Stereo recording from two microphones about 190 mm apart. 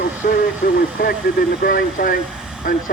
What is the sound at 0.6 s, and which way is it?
Speech, 55° left (ahead or behind).